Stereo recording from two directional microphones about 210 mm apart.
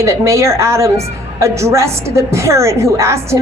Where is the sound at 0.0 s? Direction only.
15° right (ahead or behind).